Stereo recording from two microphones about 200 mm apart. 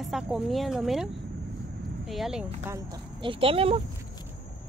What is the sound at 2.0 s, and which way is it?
Speech, centre (ahead or behind).